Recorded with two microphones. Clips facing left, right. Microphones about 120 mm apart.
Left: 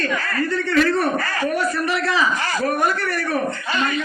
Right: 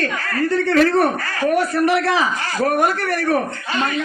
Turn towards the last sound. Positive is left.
turn(degrees=-55)  # may be behind; listen again after turning